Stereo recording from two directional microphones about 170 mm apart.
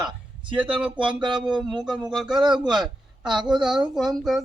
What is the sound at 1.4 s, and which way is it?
Speech, 5° right (ahead or behind).